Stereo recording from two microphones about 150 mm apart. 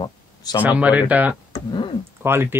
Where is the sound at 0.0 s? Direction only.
25° left (ahead or behind).